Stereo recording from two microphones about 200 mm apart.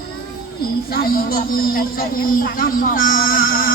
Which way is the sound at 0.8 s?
50° left (ahead or behind).